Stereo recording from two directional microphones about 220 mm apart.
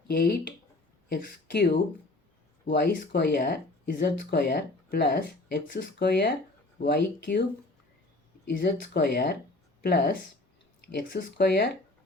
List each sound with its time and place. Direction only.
0.1 s speech: 45° left (ahead or behind)
8.4 s speech: 50° left (ahead or behind)